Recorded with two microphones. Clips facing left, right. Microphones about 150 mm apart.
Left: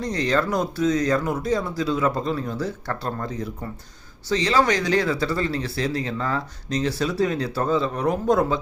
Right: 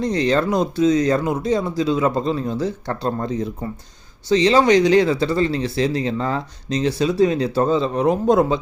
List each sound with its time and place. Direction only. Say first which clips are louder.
0.0 s speech: right 4 dB; 25° right (ahead or behind)